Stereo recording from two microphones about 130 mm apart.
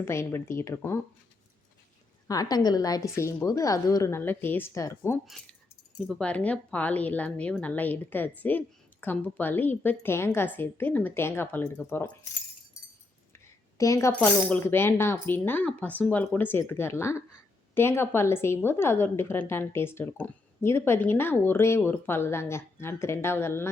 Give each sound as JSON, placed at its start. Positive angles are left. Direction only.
{"t": 0.0, "sound": "a woman's voice", "side_deg": 20}
{"t": 2.2, "sound": "a woman's voice", "side_deg": 30}
{"t": 5.2, "sound": "speech", "side_deg": 0}
{"t": 13.3, "sound": "a woman's voice", "side_deg": 25}